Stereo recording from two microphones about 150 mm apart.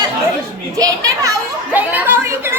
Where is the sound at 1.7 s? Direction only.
15° right (ahead or behind).